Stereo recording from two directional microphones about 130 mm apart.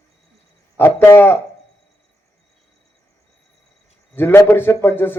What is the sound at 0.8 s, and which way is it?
Speech, 20° left (ahead or behind).